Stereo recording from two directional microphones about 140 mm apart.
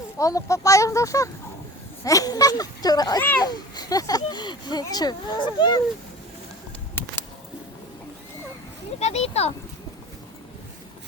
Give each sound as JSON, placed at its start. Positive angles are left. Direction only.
{"t": 0.2, "sound": "speech", "side_deg": 25}
{"t": 3.2, "sound": "a child's voice", "side_deg": 10}
{"t": 3.4, "sound": "speech", "side_deg": 30}
{"t": 9.0, "sound": "speech", "side_deg": 50}